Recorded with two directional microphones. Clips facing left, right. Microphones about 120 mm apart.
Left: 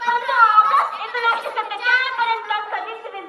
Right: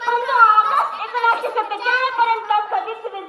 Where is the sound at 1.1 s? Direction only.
35° right (ahead or behind).